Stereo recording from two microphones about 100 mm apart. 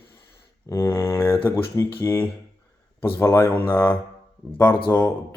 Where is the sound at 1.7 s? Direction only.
25° left (ahead or behind).